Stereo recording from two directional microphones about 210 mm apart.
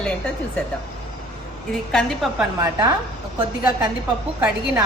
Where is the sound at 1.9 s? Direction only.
5° left (ahead or behind).